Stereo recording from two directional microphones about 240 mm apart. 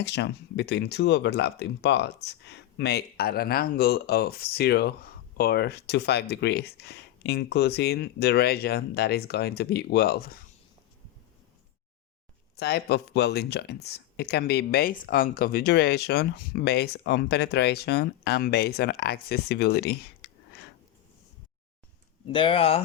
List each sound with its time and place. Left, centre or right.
0.0 s speech: left
12.5 s speech: left
22.3 s speech: left